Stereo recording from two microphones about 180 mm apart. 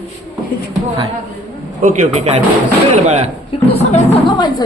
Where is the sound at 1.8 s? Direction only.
40° right (ahead or behind).